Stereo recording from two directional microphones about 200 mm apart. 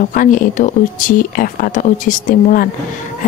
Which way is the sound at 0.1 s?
40° left (ahead or behind).